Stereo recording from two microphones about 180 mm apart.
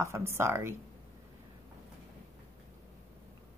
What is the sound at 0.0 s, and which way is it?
Speech, 15° right (ahead or behind).